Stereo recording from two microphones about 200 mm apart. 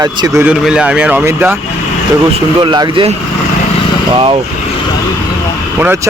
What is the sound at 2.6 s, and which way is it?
Speech, 20° right (ahead or behind).